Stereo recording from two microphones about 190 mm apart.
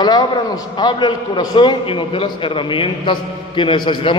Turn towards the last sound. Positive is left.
turn(degrees=25)  # may be behind; listen again after turning